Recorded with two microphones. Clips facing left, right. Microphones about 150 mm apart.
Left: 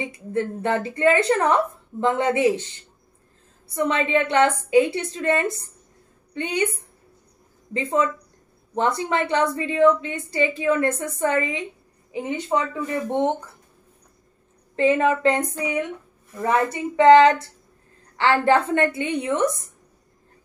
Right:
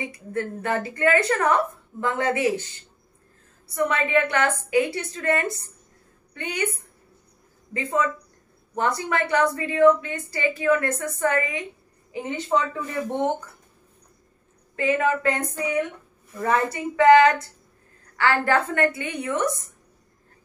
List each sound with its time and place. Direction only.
0.0 s a woman's voice: 20° left (ahead or behind)
3.7 s a woman's voice: 20° left (ahead or behind)
7.7 s a woman's voice: 20° left (ahead or behind)
14.8 s a woman's voice: 30° left (ahead or behind)